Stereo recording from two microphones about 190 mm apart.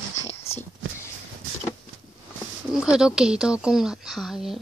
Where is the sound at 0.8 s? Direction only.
90° right.